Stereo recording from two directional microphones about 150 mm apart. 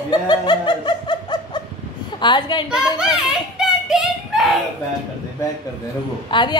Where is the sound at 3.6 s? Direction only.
5° right (ahead or behind).